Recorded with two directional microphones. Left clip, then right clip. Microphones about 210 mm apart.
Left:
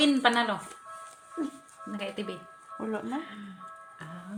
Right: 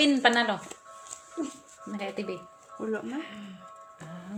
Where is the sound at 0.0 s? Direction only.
5° left (ahead or behind).